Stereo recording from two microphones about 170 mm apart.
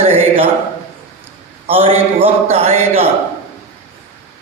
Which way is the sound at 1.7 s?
35° right (ahead or behind).